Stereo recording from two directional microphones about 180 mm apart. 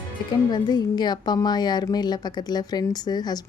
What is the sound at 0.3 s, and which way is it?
Speech, 25° left (ahead or behind).